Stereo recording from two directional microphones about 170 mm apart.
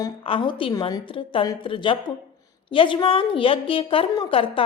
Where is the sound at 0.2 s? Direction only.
30° left (ahead or behind).